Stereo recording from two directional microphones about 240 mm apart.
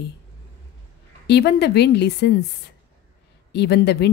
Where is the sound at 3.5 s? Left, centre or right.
Left.